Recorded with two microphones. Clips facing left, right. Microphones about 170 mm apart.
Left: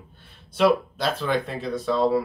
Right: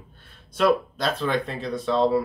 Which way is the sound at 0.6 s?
10° left (ahead or behind).